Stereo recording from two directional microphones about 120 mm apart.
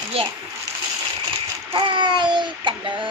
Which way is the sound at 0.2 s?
55° right (ahead or behind).